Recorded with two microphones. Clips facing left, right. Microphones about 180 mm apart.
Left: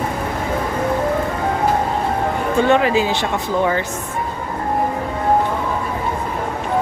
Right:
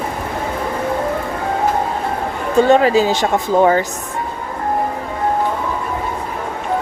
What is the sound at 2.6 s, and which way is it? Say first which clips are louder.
Speech: right 3 dB; 40° right (ahead or behind).